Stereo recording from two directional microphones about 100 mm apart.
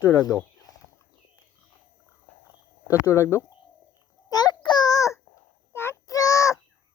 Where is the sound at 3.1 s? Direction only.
30° left (ahead or behind).